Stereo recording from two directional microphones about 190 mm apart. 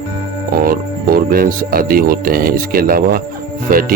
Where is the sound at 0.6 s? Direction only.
50° right (ahead or behind).